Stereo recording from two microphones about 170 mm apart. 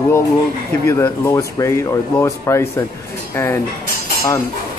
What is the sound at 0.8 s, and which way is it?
Speech, 15° left (ahead or behind).